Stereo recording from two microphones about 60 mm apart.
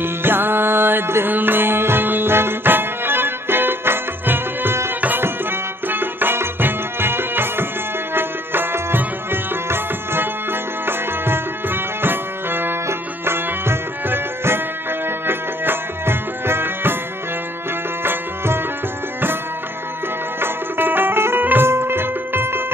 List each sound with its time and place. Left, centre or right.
0.0 s music: right
18.0 s music: right
20.3 s music: right